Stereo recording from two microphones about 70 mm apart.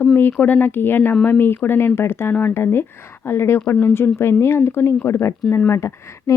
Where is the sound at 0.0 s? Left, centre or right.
Left.